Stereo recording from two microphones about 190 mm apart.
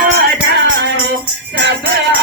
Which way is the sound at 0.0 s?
55° right (ahead or behind).